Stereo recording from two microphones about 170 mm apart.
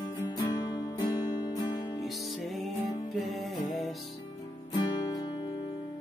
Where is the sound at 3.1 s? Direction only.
Centre (ahead or behind).